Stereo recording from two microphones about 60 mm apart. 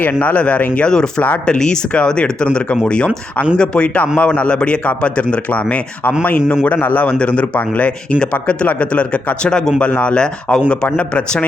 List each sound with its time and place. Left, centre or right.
0.0 s a man's voice: left
6.7 s a man's voice: left